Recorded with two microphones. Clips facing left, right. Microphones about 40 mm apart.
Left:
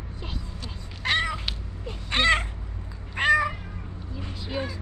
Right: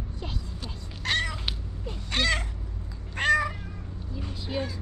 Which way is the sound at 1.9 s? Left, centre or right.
Left.